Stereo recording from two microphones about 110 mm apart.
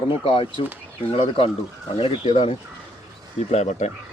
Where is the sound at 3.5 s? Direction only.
90° left.